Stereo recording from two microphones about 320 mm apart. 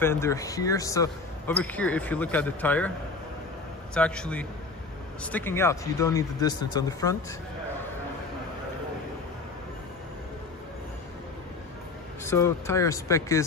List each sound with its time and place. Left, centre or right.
0.0 s speech: centre
3.9 s speech: centre
12.3 s speech: centre